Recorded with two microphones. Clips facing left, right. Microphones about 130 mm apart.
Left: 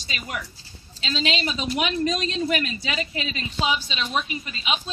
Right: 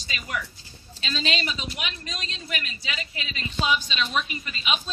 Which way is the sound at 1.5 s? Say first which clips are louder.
Left 8 dB; 40° left (ahead or behind).